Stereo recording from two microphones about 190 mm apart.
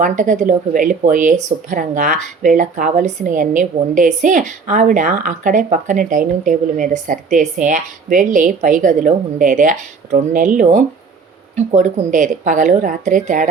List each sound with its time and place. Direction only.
0.0 s speech: 40° right (ahead or behind)